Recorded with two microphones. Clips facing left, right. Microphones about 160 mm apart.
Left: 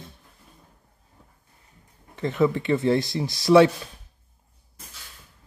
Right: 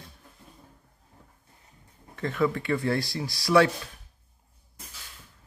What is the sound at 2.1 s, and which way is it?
Speech, 20° left (ahead or behind).